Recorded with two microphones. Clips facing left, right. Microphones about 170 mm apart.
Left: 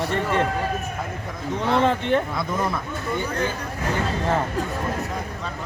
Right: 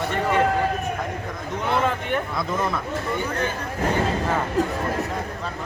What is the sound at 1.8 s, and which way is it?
Speech, 30° left (ahead or behind).